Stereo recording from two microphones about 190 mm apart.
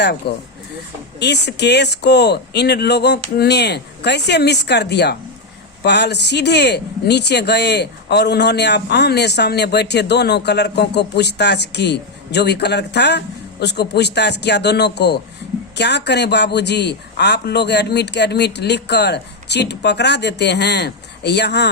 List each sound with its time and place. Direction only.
0.0 s speech: 60° left (ahead or behind)